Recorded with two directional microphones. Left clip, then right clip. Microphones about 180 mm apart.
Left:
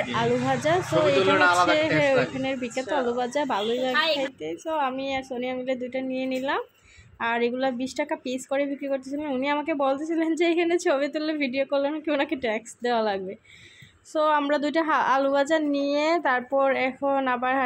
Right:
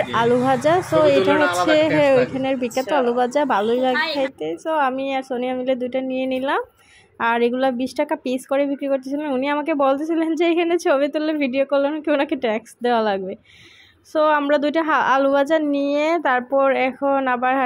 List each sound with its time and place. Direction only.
0.0 s a woman's voice: 15° right (ahead or behind)
1.3 s speech: 20° left (ahead or behind)
2.4 s a woman's voice: 15° right (ahead or behind)